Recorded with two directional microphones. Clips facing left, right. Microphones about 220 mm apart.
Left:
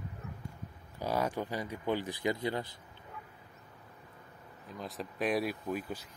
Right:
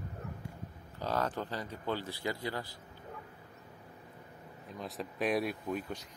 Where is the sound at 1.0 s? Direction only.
10° left (ahead or behind).